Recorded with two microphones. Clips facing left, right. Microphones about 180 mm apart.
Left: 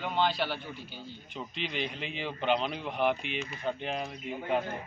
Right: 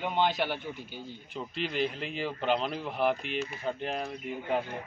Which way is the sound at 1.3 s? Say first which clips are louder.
Right 4 dB; 5° right (ahead or behind).